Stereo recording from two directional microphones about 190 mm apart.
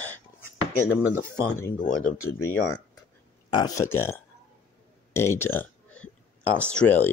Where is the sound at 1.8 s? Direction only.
40° left (ahead or behind).